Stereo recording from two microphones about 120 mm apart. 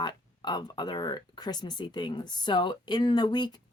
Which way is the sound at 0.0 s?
35° left (ahead or behind).